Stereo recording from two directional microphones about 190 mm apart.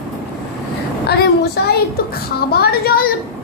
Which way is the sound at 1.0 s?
55° left (ahead or behind).